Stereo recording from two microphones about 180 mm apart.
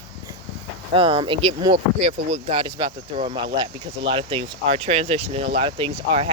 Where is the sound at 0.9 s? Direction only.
30° right (ahead or behind).